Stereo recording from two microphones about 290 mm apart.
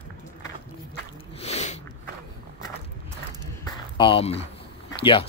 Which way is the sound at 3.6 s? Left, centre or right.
Centre.